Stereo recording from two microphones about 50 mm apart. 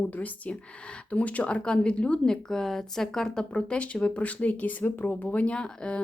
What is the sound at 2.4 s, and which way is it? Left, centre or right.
Speech, centre.